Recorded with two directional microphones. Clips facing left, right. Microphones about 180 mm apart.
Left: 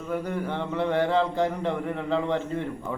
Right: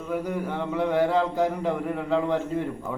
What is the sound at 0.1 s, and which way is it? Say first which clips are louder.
Speech: right 1 dB; 5° right (ahead or behind).